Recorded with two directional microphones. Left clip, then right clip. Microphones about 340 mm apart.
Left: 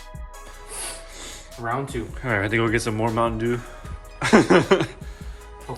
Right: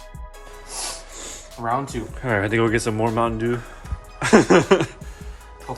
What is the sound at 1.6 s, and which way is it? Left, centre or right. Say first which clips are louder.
Speech: right 4 dB; right.